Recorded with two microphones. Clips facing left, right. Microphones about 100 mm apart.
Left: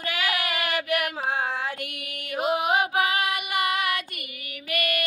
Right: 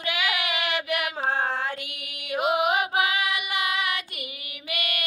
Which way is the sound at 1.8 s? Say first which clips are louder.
Left 3 dB; 50° left (ahead or behind).